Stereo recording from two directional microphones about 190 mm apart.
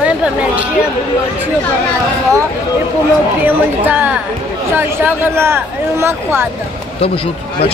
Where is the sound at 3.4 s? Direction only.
10° right (ahead or behind).